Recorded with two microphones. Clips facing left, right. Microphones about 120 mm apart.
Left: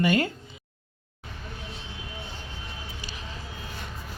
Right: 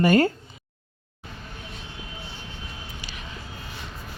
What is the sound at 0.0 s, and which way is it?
Speech, 40° right (ahead or behind).